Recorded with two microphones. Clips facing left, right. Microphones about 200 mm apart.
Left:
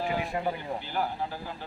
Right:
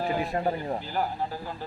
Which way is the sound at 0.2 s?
40° right (ahead or behind).